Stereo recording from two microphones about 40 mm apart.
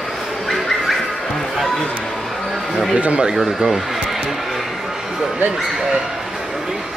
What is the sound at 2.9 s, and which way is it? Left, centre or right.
Speech, right.